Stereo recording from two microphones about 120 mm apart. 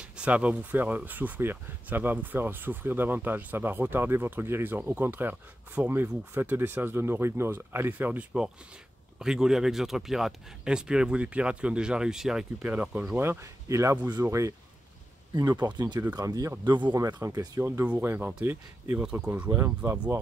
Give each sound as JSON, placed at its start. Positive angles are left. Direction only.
{"t": 0.0, "sound": "speech", "side_deg": -10}
{"t": 13.1, "sound": "speech", "side_deg": -20}
{"t": 15.3, "sound": "speech", "side_deg": -35}
{"t": 17.2, "sound": "speech", "side_deg": -30}